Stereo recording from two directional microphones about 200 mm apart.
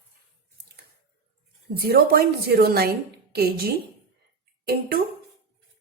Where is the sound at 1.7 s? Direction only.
50° right (ahead or behind).